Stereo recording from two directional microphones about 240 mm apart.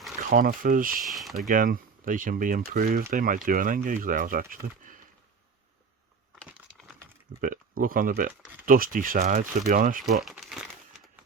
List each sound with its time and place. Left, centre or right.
0.3 s speech: right
1.0 s a sound: centre
1.5 s speech: right
7.4 s speech: right
10.2 s crumpling: centre